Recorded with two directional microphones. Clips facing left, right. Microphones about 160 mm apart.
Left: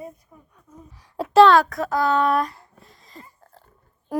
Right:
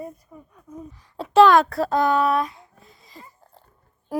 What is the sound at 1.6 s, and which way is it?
Speech, 30° right (ahead or behind).